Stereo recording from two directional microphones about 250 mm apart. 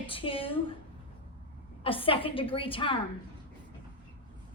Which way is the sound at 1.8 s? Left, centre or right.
Left.